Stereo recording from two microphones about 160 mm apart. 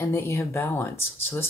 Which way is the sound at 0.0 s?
15° left (ahead or behind).